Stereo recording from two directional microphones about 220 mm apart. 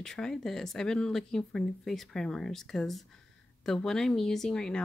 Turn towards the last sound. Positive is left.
turn(degrees=5)  # may be behind; listen again after turning